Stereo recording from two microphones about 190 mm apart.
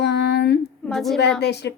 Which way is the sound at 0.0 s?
60° left (ahead or behind).